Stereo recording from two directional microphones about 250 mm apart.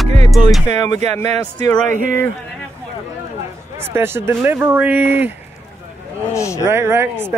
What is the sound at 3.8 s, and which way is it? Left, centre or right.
Speech, centre.